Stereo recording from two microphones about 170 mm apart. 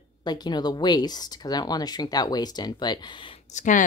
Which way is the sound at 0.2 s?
25° left (ahead or behind).